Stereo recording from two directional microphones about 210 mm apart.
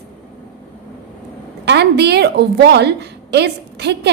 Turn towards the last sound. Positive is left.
turn(degrees=-50)  # may be behind; listen again after turning